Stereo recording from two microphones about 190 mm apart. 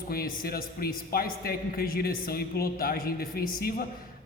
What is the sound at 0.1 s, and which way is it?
A man's voice, 50° left (ahead or behind).